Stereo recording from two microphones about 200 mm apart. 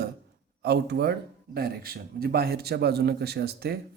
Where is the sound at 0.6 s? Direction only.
55° right (ahead or behind).